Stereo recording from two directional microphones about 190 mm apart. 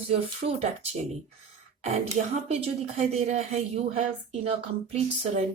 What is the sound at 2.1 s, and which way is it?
Speech, 35° right (ahead or behind).